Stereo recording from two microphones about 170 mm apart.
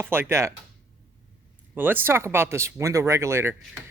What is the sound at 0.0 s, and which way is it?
Speech, 15° right (ahead or behind).